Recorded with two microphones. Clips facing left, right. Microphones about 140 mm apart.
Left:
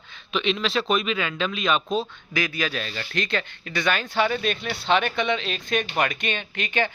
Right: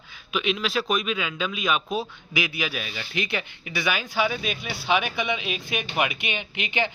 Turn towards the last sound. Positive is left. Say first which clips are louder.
# left 2 dB
turn(degrees=-15)  # may be behind; listen again after turning